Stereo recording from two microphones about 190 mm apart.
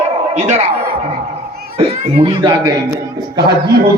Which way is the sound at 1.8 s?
25° right (ahead or behind).